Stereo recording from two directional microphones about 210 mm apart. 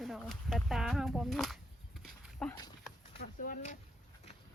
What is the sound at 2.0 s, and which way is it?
Dog, 5° left (ahead or behind).